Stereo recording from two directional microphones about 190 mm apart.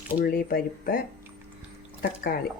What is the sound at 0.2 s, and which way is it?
Speech, 50° left (ahead or behind).